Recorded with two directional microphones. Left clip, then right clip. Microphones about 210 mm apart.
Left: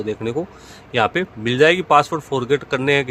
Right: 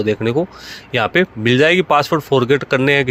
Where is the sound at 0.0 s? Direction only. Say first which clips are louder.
Right 6 dB; 25° right (ahead or behind).